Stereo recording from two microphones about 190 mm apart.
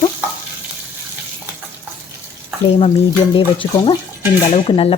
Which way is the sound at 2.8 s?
30° left (ahead or behind).